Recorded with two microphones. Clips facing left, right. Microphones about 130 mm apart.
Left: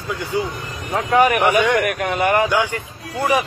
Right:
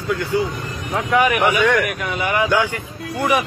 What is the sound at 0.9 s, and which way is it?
Speech, 40° left (ahead or behind).